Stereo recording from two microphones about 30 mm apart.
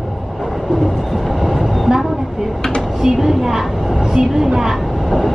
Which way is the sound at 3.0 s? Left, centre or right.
Centre.